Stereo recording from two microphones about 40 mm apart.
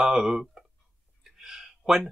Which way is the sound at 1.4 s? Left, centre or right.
Centre.